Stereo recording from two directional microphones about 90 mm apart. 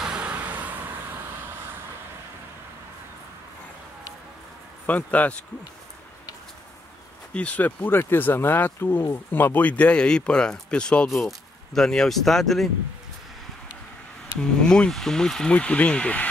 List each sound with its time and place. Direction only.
0.0 s vehicle: 10° right (ahead or behind)
4.8 s speech: 15° left (ahead or behind)
7.3 s speech: 15° left (ahead or behind)
14.6 s speech: 10° left (ahead or behind)